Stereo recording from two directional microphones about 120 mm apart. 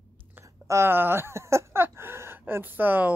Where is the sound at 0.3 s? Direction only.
20° right (ahead or behind).